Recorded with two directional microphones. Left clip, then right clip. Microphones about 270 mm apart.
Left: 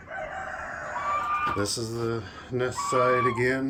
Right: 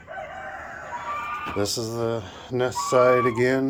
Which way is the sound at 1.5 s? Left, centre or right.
Centre.